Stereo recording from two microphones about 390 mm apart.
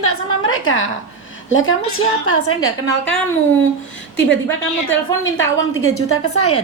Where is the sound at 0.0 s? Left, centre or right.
Left.